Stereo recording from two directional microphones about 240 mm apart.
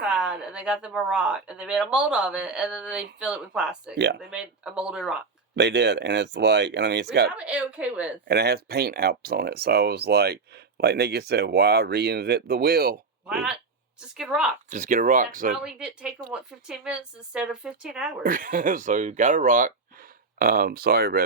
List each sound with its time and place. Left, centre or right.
0.2 s speech: centre
3.9 s speech: right
4.2 s speech: centre
5.5 s speech: right
7.3 s speech: centre
8.3 s speech: right
14.2 s speech: centre
14.7 s speech: right
15.5 s speech: centre
18.2 s speech: right